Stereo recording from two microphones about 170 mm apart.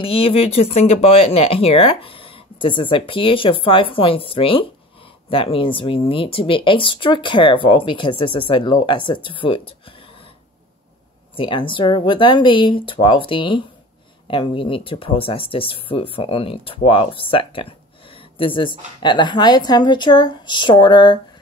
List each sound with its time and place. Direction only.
0.0 s speech: 35° left (ahead or behind)
11.3 s speech: 30° left (ahead or behind)